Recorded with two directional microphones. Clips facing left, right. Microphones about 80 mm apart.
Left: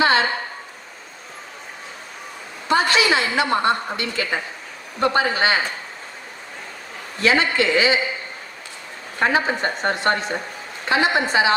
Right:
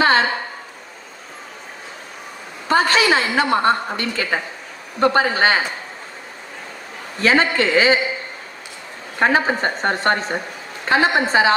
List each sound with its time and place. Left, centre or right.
0.0 s a sound: right
2.6 s a woman's voice: right
7.2 s a woman's voice: right
9.2 s a woman's voice: right